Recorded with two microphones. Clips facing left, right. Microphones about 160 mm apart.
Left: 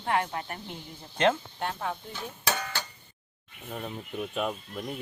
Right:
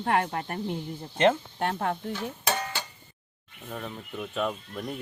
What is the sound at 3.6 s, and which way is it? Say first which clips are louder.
Speech: even; 10° left (ahead or behind).